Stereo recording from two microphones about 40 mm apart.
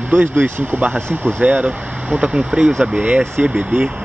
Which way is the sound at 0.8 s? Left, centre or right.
Right.